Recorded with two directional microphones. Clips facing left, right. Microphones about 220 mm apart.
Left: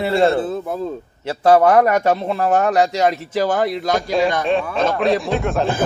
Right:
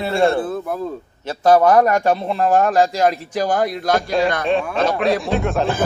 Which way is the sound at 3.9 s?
Centre (ahead or behind).